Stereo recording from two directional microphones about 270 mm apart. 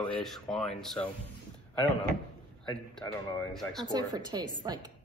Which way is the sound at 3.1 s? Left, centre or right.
Centre.